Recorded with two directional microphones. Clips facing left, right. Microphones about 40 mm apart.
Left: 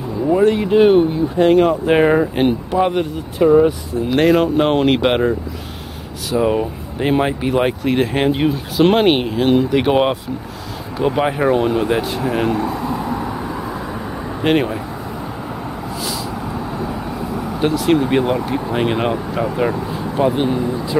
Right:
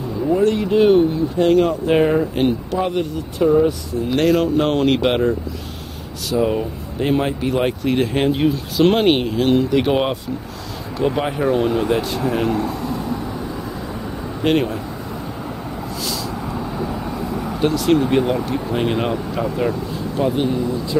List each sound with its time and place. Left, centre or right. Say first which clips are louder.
0.4 s speech: left 3 dB; centre
4.1 s speech: left 2 dB; centre
6.3 s speech: left 2 dB; centre
14.4 s speech: left 1 dB; centre
16.0 s vehicle: left 1 dB; centre